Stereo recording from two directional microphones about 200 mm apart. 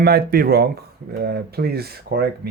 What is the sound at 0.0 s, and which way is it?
Speech, 50° right (ahead or behind).